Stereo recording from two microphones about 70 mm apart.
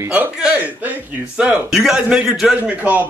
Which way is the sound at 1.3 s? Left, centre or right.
Centre.